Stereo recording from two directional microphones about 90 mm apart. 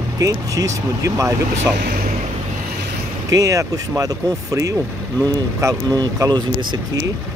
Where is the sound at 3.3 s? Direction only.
40° right (ahead or behind).